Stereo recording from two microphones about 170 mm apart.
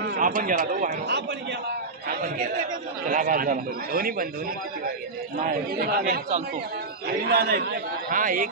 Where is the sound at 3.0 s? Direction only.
55° right (ahead or behind).